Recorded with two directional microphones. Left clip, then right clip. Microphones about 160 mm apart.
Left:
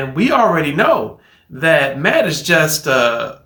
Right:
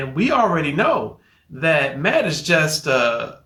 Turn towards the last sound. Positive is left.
turn(degrees=-5)  # may be behind; listen again after turning